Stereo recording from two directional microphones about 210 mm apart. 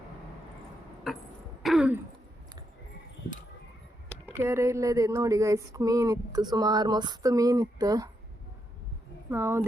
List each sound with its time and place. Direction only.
1.6 s throat clearing: 5° right (ahead or behind)
4.3 s speech: 15° right (ahead or behind)
9.3 s speech: 10° right (ahead or behind)